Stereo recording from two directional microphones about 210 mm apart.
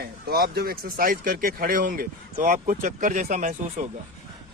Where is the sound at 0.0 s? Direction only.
50° right (ahead or behind).